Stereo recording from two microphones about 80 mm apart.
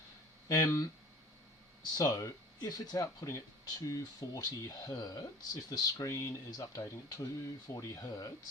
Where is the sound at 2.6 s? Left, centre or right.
Left.